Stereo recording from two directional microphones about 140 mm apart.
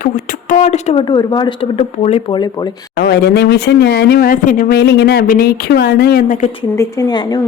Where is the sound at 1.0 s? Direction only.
30° left (ahead or behind).